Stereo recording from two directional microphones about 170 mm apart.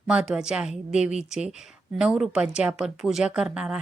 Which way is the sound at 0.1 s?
5° right (ahead or behind).